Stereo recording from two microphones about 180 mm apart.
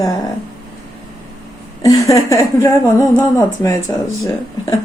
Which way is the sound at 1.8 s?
20° left (ahead or behind).